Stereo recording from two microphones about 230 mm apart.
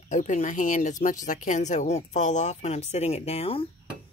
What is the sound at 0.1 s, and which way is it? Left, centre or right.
A woman's voice, left.